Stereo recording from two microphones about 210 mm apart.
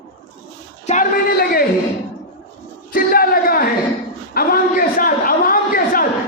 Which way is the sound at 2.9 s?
45° left (ahead or behind).